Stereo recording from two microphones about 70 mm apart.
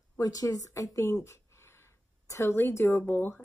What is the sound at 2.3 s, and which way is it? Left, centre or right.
Speech, left.